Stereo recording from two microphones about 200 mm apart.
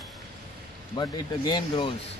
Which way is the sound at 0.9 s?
20° left (ahead or behind).